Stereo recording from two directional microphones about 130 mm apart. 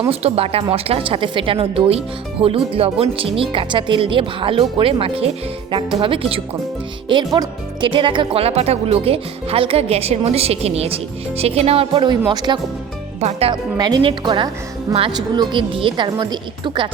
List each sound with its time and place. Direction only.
0.0 s speech: 50° right (ahead or behind)
12.1 s a woman's voice: 35° right (ahead or behind)
13.1 s speech: 55° right (ahead or behind)
13.5 s a woman's voice: 30° right (ahead or behind)